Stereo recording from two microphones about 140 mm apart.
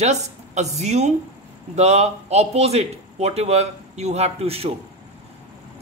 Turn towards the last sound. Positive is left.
turn(degrees=-45)  # may be behind; listen again after turning